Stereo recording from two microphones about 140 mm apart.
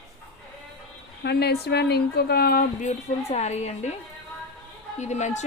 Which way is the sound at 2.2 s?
90° left.